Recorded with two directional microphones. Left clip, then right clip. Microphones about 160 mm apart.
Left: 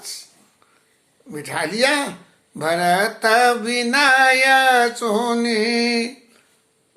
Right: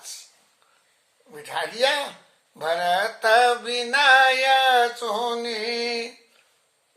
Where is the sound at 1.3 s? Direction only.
15° left (ahead or behind).